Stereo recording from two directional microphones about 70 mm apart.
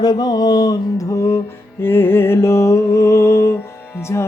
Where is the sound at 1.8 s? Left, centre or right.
Left.